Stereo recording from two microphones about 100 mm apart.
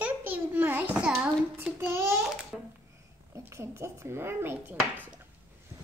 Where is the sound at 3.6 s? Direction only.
25° right (ahead or behind).